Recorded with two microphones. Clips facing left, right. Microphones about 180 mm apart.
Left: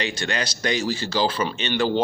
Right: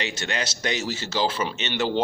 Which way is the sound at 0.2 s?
25° right (ahead or behind).